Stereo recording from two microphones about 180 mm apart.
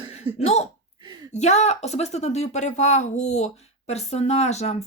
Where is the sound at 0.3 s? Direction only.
35° left (ahead or behind).